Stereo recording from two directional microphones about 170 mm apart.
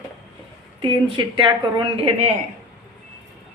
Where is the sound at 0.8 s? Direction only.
30° right (ahead or behind).